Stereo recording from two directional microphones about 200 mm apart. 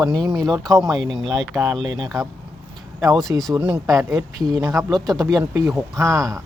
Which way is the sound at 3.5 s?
10° right (ahead or behind).